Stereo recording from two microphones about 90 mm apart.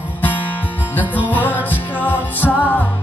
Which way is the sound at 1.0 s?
15° right (ahead or behind).